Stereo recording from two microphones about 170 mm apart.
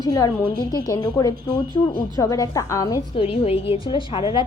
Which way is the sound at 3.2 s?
35° left (ahead or behind).